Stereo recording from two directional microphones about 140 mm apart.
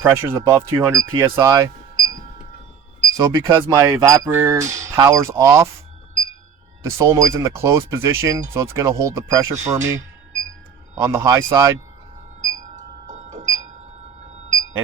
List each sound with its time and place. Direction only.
0.0 s speech: 15° right (ahead or behind)
1.5 s a sound: 25° right (ahead or behind)
3.2 s speech: 20° right (ahead or behind)
7.0 s speech: 25° right (ahead or behind)
11.0 s speech: 25° right (ahead or behind)
12.4 s a sound: 60° right (ahead or behind)